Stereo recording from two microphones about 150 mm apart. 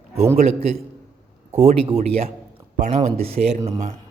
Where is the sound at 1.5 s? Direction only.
50° right (ahead or behind).